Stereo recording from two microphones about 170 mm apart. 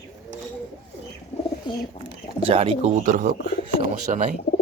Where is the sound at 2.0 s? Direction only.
35° right (ahead or behind).